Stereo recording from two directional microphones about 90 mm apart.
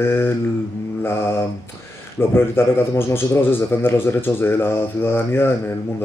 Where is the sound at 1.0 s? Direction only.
25° left (ahead or behind).